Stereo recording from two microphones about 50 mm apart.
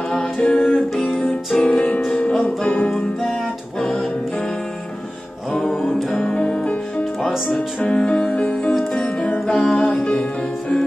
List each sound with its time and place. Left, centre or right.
0.5 s music: left
5.5 s music: centre
6.3 s music: left
7.4 s speech: left
7.9 s music: left
9.5 s music: centre
9.8 s music: left